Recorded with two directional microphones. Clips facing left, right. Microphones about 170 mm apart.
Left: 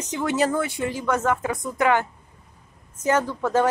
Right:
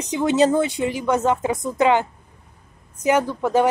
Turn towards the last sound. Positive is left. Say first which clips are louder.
# right 3 dB
turn(degrees=-15)  # may be behind; listen again after turning